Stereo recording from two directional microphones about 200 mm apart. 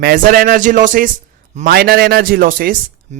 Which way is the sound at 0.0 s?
45° right (ahead or behind).